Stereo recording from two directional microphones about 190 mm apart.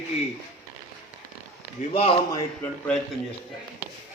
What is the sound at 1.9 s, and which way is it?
Speech, 30° left (ahead or behind).